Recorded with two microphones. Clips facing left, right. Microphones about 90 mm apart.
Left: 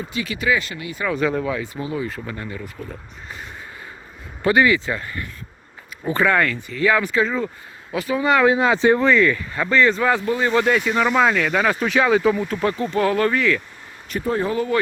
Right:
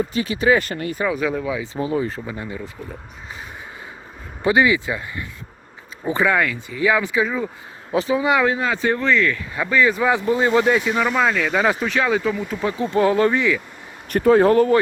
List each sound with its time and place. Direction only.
0.1 s speech: 35° right (ahead or behind)
0.6 s speech: 45° right (ahead or behind)
1.0 s speech: 5° right (ahead or behind)
1.6 s speech: 25° right (ahead or behind)
2.2 s speech: 15° right (ahead or behind)
4.4 s speech: 15° right (ahead or behind)
7.9 s speech: 20° right (ahead or behind)
8.6 s speech: 25° left (ahead or behind)
9.4 s speech: 5° right (ahead or behind)
11.0 s speech: 5° left (ahead or behind)
12.4 s speech: 5° right (ahead or behind)
12.7 s speech: 20° right (ahead or behind)
14.1 s speech: 75° right (ahead or behind)